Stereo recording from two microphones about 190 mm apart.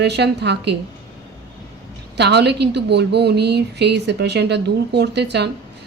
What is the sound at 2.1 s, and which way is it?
A woman's voice, 60° right (ahead or behind).